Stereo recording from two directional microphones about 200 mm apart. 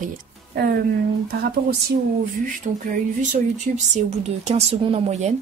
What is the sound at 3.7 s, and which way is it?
Speech, 40° right (ahead or behind).